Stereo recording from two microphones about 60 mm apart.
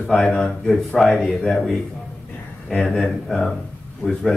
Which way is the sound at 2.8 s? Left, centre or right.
Centre.